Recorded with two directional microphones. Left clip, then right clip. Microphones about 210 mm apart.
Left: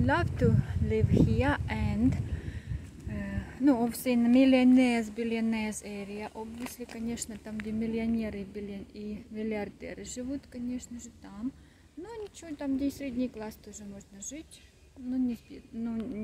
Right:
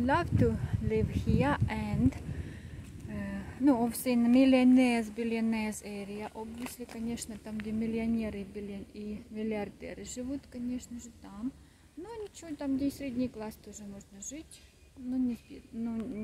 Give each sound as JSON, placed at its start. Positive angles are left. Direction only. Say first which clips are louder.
{"t": 0.0, "sound": "speech", "louder": "left 1 dB", "side_deg": 0}